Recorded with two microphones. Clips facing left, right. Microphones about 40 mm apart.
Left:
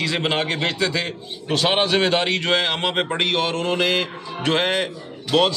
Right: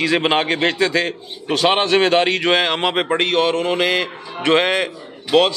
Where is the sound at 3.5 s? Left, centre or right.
Centre.